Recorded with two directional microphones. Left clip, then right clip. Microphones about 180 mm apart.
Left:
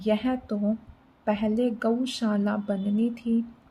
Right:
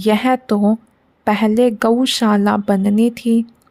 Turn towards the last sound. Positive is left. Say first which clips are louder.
# right 11 dB
turn(degrees=-70)  # may be behind; listen again after turning